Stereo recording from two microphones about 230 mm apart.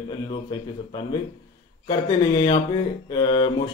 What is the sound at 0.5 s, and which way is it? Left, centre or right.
Speech, centre.